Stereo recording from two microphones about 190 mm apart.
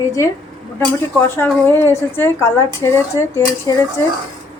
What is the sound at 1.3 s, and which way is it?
A woman's voice, 10° left (ahead or behind).